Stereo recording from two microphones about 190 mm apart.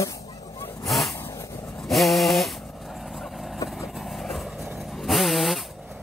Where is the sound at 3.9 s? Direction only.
Centre (ahead or behind).